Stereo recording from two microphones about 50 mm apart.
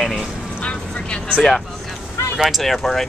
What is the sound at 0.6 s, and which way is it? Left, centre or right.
Vehicle, left.